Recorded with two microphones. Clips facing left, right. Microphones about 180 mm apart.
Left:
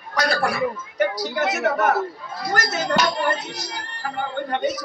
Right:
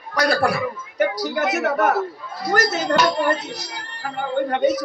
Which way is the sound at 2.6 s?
60° right (ahead or behind).